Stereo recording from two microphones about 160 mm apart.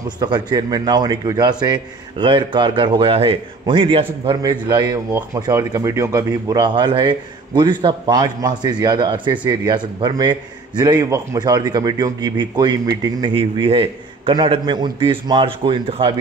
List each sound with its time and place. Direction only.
0.2 s a man's voice: 25° right (ahead or behind)